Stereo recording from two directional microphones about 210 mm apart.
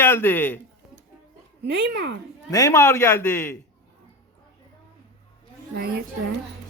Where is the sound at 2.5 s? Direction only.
15° left (ahead or behind).